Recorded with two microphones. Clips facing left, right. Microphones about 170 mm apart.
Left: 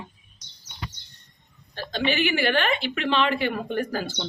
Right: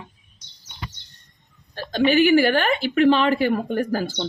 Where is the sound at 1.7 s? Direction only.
45° right (ahead or behind).